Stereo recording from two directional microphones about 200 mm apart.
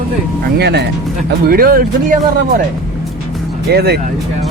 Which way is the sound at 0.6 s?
55° right (ahead or behind).